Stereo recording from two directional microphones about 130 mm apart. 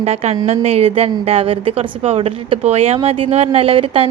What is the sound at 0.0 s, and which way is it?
A woman's voice, 55° right (ahead or behind).